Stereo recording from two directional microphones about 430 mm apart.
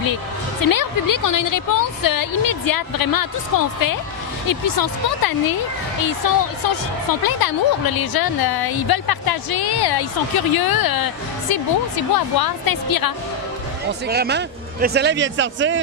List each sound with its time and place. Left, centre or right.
0.6 s a woman's voice: left
14.1 s speech: right